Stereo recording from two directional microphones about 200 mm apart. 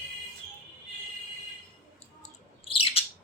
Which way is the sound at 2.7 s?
30° left (ahead or behind).